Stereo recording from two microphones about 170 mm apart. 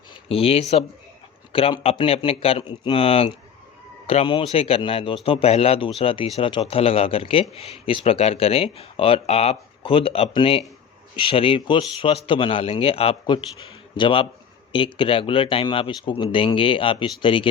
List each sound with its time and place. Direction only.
0.3 s speech: 35° left (ahead or behind)